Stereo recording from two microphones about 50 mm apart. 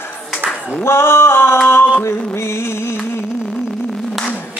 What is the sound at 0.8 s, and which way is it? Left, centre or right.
Singing, left.